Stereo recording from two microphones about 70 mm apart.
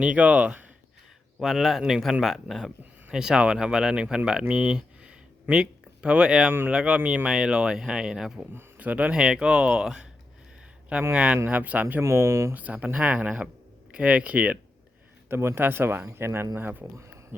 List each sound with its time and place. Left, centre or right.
0.0 s speech: centre
1.4 s speech: centre
4.3 s a sound: centre
6.7 s speech: centre
7.3 s speech: centre
11.1 s speech: centre
12.0 s speech: right
12.5 s speech: right
15.3 s speech: right